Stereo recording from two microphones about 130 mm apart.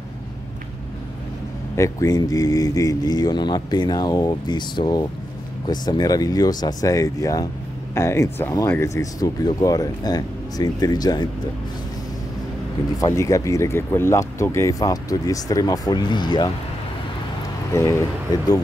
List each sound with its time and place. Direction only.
1.8 s speech: 25° left (ahead or behind)
13.0 s speech: 25° left (ahead or behind)
17.7 s speech: 20° left (ahead or behind)